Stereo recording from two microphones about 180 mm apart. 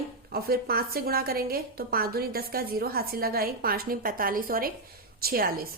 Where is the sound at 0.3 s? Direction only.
60° right (ahead or behind).